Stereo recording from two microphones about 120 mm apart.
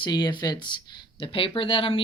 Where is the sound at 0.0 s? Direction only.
35° left (ahead or behind).